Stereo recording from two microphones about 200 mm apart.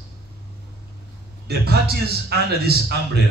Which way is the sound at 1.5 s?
50° right (ahead or behind).